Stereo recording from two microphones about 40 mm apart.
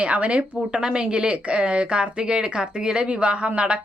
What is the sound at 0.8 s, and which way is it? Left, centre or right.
Speech, right.